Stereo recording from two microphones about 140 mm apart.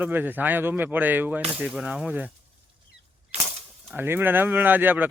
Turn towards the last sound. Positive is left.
turn(degrees=-15)  # may be behind; listen again after turning